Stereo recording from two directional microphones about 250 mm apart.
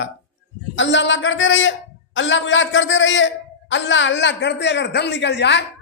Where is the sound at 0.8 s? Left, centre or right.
Left.